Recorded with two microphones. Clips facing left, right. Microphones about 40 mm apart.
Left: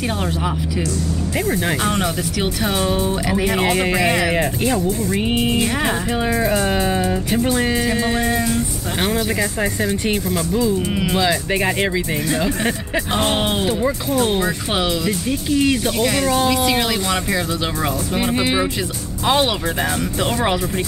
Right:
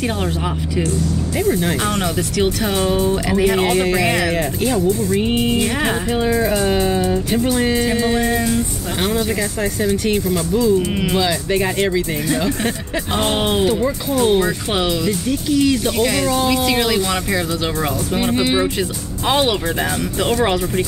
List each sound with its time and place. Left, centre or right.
1.6 s speech: centre
3.3 s music: centre
3.7 s speech: centre
5.2 s music: centre
9.0 s speech: centre
10.3 s music: centre
11.5 s speech: centre
13.2 s music: centre
15.2 s speech: left
16.4 s music: centre